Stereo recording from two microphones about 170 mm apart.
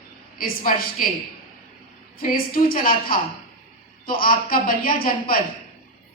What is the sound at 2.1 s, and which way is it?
A woman's voice, 60° left (ahead or behind).